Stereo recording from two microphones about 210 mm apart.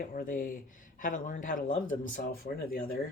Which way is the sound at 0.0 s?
40° left (ahead or behind).